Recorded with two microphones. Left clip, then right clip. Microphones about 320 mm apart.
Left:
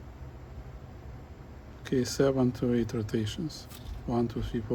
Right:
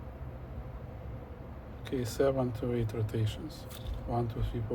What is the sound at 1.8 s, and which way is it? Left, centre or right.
Speech, left.